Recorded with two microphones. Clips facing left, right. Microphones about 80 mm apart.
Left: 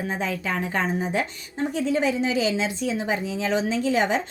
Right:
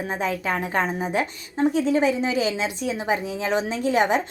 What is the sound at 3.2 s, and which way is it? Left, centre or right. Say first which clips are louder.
Speech: even; right.